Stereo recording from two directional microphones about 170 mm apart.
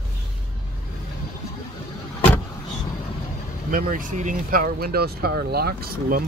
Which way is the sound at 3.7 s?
55° right (ahead or behind).